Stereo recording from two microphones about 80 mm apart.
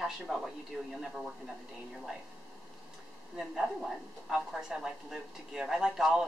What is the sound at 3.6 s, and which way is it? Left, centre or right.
A woman's voice, centre.